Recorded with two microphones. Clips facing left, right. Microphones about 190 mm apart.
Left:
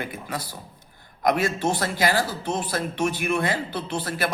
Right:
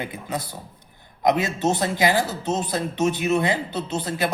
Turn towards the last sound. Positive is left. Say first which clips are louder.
# right 2 dB
turn(degrees=-20)  # may be behind; listen again after turning